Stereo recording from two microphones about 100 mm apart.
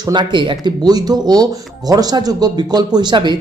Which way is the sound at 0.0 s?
50° right (ahead or behind).